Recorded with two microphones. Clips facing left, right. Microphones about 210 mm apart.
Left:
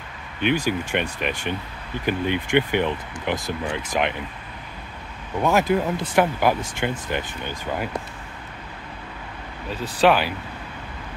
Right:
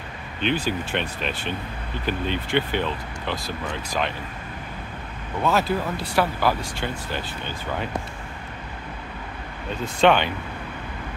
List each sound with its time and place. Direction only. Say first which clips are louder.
0.4 s speech: left 2 dB; 10° left (ahead or behind)
5.4 s speech: left 3 dB; 15° left (ahead or behind)
9.7 s speech: even; 5° left (ahead or behind)